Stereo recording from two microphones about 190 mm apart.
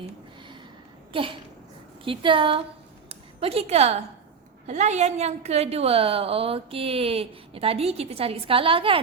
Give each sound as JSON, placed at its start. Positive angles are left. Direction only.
{"t": 1.1, "sound": "speech", "side_deg": -25}
{"t": 3.1, "sound": "a sound", "side_deg": -30}
{"t": 4.6, "sound": "a woman's voice", "side_deg": -35}